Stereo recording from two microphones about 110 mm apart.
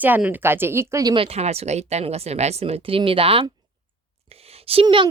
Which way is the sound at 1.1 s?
70° right (ahead or behind).